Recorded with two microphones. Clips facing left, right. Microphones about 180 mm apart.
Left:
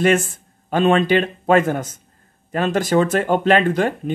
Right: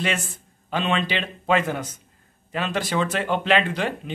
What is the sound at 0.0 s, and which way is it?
Speech, 50° left (ahead or behind).